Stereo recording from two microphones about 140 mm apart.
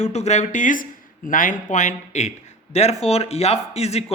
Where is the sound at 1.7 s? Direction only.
60° left (ahead or behind).